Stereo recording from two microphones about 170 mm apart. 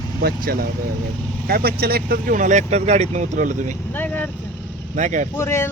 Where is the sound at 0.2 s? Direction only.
60° right (ahead or behind); by 3.8 s 45° right (ahead or behind).